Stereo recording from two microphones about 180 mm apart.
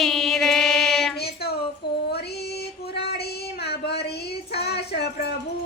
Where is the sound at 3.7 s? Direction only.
65° left (ahead or behind).